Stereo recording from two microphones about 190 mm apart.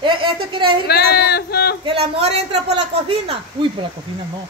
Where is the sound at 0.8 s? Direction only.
55° left (ahead or behind).